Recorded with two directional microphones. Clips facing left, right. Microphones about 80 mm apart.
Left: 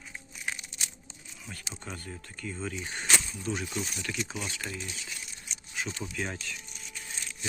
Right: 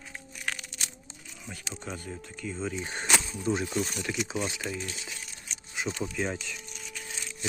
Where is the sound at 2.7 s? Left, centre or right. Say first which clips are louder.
Right 1 dB; right.